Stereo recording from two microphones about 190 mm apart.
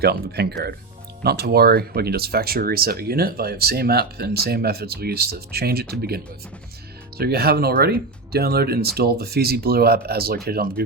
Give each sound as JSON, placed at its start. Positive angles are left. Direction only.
{"t": 0.0, "sound": "speech", "side_deg": -55}